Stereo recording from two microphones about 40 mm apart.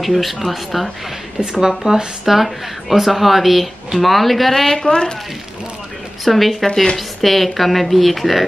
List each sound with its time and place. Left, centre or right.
0.0 s speech: centre
1.4 s speech: centre
4.7 s speech: left
6.2 s speech: centre